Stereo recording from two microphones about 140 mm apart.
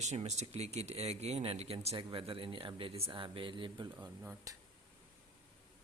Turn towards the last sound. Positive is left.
turn(degrees=-15)  # may be behind; listen again after turning